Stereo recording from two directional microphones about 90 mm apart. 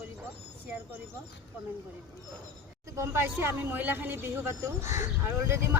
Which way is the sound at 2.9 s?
30° right (ahead or behind).